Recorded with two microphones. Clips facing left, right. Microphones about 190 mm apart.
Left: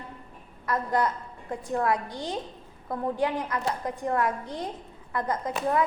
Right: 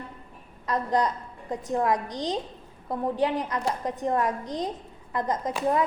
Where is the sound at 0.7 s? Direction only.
20° right (ahead or behind).